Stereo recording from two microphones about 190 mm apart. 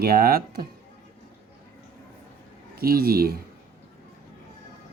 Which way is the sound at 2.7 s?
55° right (ahead or behind).